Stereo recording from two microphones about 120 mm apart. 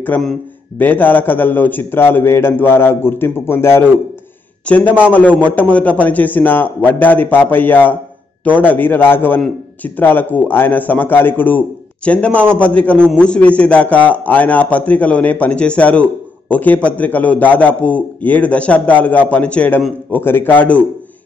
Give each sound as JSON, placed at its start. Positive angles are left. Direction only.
{"t": 0.1, "sound": "a man's voice", "side_deg": 15}